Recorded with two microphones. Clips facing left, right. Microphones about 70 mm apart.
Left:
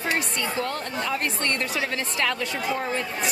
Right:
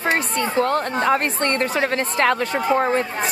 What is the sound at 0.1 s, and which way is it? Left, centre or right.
A woman's voice, right.